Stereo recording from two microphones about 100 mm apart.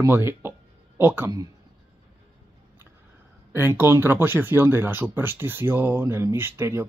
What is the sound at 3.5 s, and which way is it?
Speech, 25° right (ahead or behind).